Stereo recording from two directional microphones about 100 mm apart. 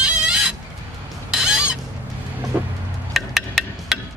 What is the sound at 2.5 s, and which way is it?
Vehicle, 20° right (ahead or behind).